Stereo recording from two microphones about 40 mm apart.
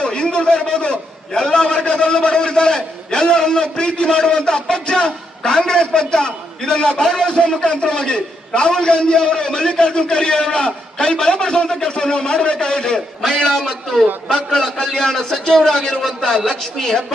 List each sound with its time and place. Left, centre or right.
0.0 s a man's voice: left